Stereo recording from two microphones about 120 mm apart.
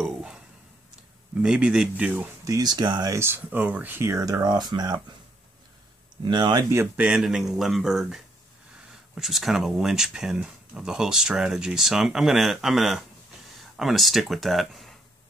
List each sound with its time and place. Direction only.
0.0 s a sound: 5° right (ahead or behind)
1.4 s speech: 5° right (ahead or behind)
2.4 s speech: 30° right (ahead or behind)
3.2 s speech: 20° right (ahead or behind); by 4.9 s 35° right (ahead or behind)
6.2 s speech: 40° right (ahead or behind)
6.7 s speech: 20° right (ahead or behind)
7.1 s speech: 5° right (ahead or behind)